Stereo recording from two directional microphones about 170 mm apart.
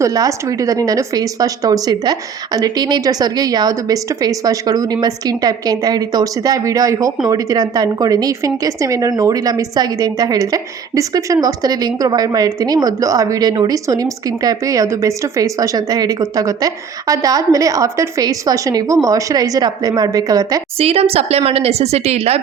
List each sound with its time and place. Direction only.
0.0 s a woman's voice: 20° right (ahead or behind)
20.7 s a woman's voice: 35° right (ahead or behind)